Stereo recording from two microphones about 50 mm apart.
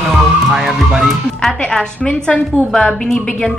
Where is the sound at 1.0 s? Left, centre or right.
Centre.